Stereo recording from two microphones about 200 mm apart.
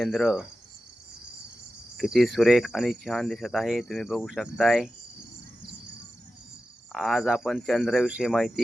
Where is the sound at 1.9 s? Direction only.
Centre (ahead or behind).